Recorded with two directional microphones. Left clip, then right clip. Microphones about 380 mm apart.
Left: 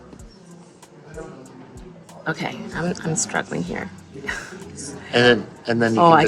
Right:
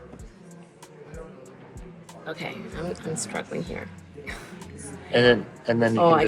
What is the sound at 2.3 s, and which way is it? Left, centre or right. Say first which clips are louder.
Speech: left 7 dB; left.